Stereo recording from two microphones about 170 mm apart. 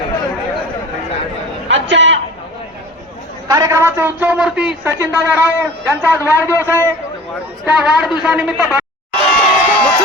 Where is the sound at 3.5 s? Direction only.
20° right (ahead or behind).